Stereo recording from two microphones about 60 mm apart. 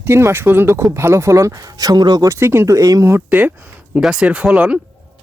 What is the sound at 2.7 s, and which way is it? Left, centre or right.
Speech, right.